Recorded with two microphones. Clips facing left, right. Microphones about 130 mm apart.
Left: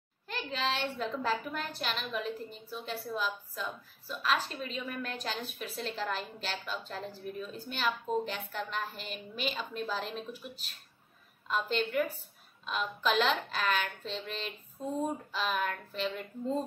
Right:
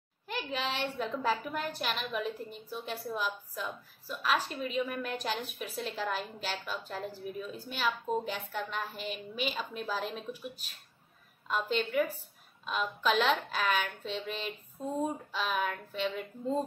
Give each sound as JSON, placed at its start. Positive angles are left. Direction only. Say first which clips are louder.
{"t": 0.3, "sound": "a woman's voice", "louder": "left 1 dB", "side_deg": -10}